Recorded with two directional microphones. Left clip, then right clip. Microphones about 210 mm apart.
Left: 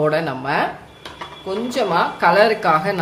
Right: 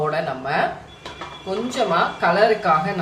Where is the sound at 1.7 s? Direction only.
40° left (ahead or behind).